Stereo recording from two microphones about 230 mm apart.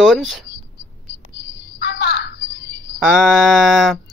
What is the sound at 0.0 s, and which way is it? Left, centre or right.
Speech, centre.